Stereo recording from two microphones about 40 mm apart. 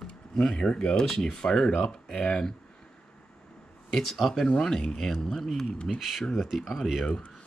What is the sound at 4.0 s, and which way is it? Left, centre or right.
Speech, centre.